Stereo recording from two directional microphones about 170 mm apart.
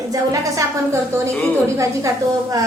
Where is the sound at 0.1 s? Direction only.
20° right (ahead or behind).